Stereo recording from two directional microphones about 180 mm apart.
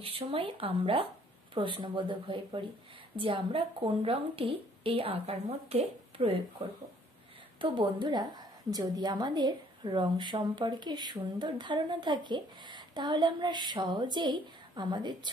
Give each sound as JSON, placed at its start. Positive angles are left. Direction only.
{"t": 0.0, "sound": "a woman's voice", "side_deg": -30}
{"t": 7.6, "sound": "a woman's voice", "side_deg": -25}